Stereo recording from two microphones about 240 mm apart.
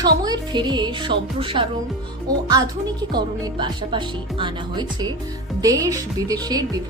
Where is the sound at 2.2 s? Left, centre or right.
Centre.